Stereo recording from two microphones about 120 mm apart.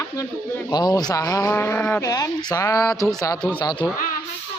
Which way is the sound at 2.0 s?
30° left (ahead or behind).